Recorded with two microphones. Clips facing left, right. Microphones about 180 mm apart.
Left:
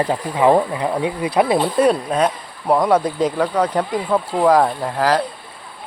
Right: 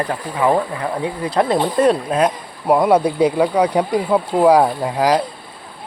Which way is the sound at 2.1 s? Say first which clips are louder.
Right 1 dB; 10° right (ahead or behind).